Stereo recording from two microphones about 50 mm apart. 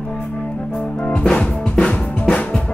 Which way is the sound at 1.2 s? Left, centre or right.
Centre.